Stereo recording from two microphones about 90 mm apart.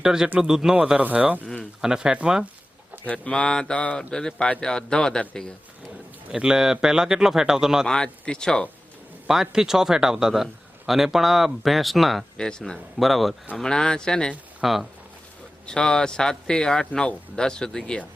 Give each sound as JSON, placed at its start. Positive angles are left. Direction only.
{"t": 0.0, "sound": "speech", "side_deg": -5}
{"t": 3.1, "sound": "speech", "side_deg": 10}
{"t": 6.3, "sound": "speech", "side_deg": -5}
{"t": 7.9, "sound": "speech", "side_deg": 10}
{"t": 9.2, "sound": "speech", "side_deg": -5}
{"t": 14.6, "sound": "speech", "side_deg": 0}
{"t": 15.6, "sound": "speech", "side_deg": 10}